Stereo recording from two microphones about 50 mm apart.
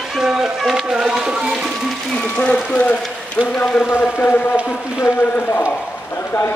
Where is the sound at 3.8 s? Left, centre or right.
Centre.